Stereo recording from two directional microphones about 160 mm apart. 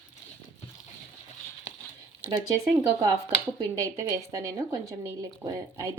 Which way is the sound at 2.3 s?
25° right (ahead or behind).